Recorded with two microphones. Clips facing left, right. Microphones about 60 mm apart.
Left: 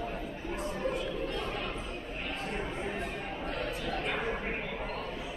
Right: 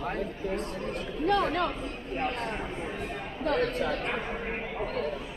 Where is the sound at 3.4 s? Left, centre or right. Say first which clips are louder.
Right 11 dB; right.